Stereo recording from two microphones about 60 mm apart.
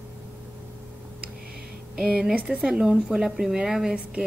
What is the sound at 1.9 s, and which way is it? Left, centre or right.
Speech, centre.